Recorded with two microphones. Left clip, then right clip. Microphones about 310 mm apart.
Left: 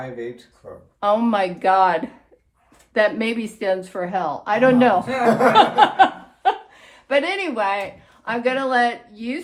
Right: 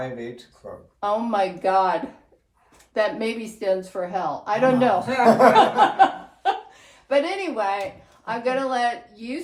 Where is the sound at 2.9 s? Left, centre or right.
Left.